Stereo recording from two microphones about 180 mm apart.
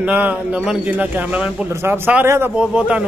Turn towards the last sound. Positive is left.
turn(degrees=-5)  # may be behind; listen again after turning